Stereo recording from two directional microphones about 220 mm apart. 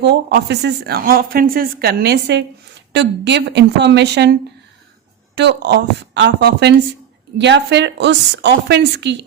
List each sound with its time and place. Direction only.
0.0 s a woman's voice: 50° right (ahead or behind)